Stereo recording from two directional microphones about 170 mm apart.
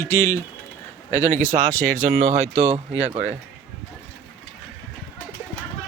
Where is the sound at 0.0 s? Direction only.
15° left (ahead or behind).